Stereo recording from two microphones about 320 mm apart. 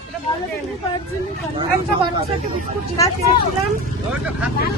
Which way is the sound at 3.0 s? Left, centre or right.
Centre.